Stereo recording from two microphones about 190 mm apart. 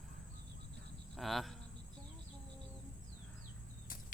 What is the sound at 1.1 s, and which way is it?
Speech, centre (ahead or behind).